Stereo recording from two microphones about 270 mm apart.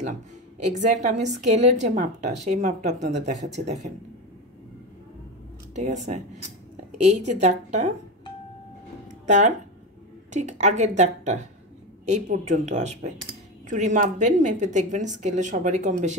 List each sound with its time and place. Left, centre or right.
0.7 s a woman's voice: right
5.8 s a woman's voice: right
9.2 s a woman's voice: right